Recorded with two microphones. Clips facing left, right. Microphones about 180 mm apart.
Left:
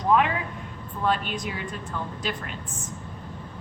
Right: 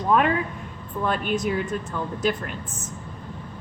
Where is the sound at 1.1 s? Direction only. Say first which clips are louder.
Right 5 dB; 45° right (ahead or behind).